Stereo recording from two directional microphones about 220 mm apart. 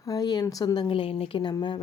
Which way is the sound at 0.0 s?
15° left (ahead or behind).